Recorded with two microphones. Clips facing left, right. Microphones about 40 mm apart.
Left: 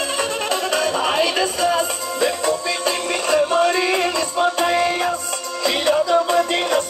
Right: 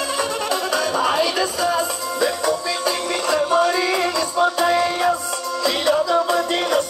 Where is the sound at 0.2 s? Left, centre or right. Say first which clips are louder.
Left 1 dB; left.